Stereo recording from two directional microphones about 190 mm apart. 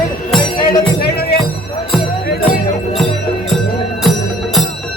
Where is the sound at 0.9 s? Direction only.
55° left (ahead or behind).